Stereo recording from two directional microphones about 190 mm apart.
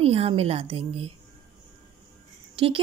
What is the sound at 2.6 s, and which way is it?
Speech, 25° right (ahead or behind).